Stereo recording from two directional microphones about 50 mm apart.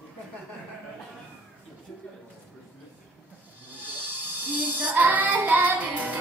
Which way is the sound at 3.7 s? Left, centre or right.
Right.